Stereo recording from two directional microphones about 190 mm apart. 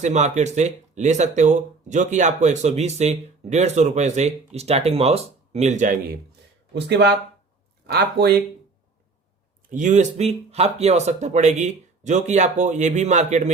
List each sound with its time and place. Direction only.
0.0 s speech: 40° right (ahead or behind)
6.7 s speech: 60° right (ahead or behind)
9.6 s speech: 40° right (ahead or behind)